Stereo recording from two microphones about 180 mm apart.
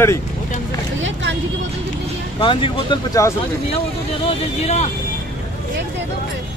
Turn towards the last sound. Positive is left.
turn(degrees=35)  # may be behind; listen again after turning